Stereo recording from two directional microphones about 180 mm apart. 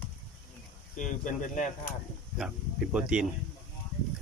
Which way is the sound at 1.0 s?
45° left (ahead or behind).